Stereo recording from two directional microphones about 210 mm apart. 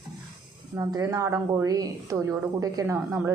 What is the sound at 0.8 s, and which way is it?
Speech, 15° right (ahead or behind).